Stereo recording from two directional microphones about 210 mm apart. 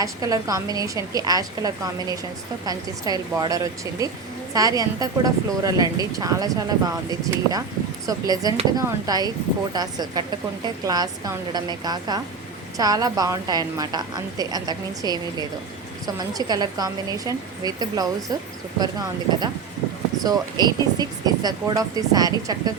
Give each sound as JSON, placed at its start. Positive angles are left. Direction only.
{"t": 0.0, "sound": "speech", "side_deg": -15}